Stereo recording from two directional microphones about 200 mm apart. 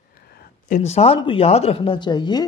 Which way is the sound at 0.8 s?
30° left (ahead or behind).